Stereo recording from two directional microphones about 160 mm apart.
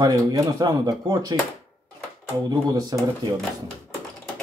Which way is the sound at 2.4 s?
25° right (ahead or behind).